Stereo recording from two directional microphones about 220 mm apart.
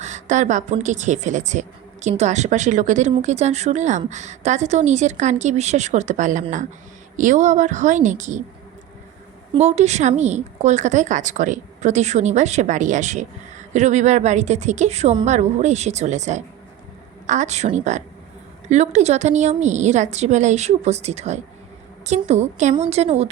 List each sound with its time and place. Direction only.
0.0 s speech: 35° right (ahead or behind)
9.5 s a woman's voice: 30° right (ahead or behind)